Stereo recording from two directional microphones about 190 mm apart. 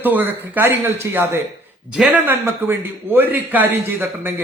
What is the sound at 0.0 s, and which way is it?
A man's voice, 10° right (ahead or behind).